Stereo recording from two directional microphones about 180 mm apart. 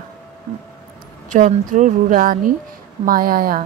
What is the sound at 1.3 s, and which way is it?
A woman's voice, 45° right (ahead or behind).